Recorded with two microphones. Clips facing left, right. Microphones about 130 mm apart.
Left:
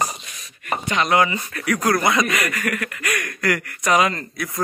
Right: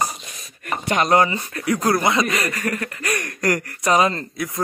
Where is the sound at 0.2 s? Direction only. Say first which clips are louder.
Right 3 dB; 40° right (ahead or behind).